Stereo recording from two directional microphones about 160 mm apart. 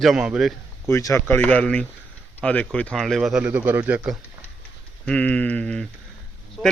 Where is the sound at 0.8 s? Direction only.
15° left (ahead or behind); by 4.2 s 10° right (ahead or behind).